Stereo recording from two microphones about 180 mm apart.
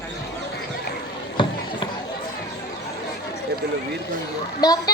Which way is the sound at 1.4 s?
25° left (ahead or behind).